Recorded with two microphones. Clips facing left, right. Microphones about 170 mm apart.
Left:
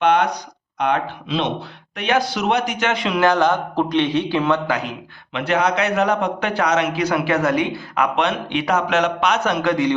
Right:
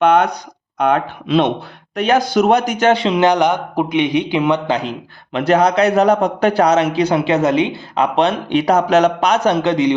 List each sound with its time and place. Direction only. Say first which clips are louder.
0.0 s a sound: right 4 dB; 50° right (ahead or behind)
0.8 s speech: right 4 dB; 50° right (ahead or behind)
2.0 s a man's voice: right 6 dB; 45° right (ahead or behind); by 4.9 s 25° right (ahead or behind)
5.3 s a man's voice: right 6 dB; 40° right (ahead or behind); by 9.9 s 20° right (ahead or behind)